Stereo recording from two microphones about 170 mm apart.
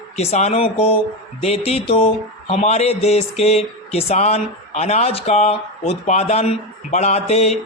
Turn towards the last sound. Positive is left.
turn(degrees=40)  # may be behind; listen again after turning